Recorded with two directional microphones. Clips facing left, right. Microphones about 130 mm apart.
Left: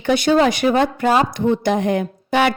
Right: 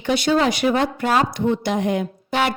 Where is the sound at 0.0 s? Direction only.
50° left (ahead or behind).